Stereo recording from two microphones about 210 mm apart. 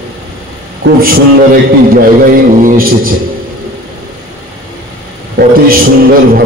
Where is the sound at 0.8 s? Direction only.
45° right (ahead or behind).